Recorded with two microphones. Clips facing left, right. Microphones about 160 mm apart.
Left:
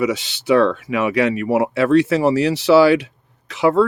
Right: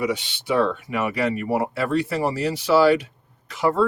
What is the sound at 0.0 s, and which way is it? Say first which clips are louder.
Speech: left 5 dB; 90° left.